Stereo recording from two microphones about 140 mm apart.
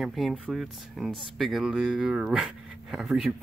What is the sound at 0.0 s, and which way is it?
Speech, centre (ahead or behind).